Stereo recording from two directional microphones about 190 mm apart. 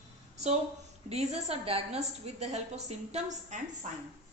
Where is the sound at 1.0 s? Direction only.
35° right (ahead or behind).